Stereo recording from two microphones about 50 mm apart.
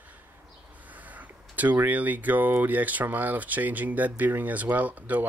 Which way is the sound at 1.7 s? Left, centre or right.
Right.